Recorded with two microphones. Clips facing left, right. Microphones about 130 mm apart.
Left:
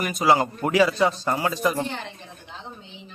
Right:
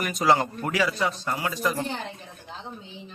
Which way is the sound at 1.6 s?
15° left (ahead or behind).